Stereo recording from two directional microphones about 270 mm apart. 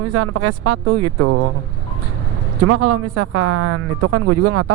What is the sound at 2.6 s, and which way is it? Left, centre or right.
Speech, right.